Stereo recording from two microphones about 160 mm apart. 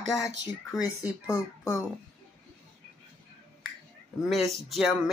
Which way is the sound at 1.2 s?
20° left (ahead or behind).